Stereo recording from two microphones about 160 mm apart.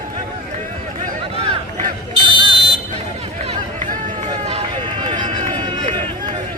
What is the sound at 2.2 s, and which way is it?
Buzzer, 30° right (ahead or behind).